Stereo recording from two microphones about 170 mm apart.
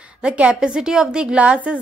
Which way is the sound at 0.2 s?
5° right (ahead or behind).